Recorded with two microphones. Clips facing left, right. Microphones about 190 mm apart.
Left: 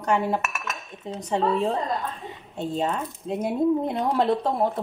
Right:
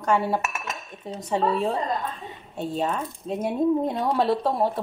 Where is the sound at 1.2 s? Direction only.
20° left (ahead or behind).